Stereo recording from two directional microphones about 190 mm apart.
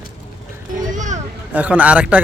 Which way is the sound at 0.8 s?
40° right (ahead or behind).